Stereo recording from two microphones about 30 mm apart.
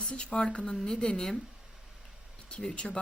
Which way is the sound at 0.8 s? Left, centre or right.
Left.